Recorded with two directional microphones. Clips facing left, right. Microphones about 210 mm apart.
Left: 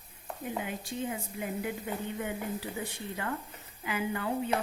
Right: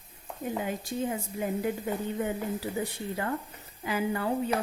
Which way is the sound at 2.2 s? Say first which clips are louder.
Right 4 dB; 40° right (ahead or behind).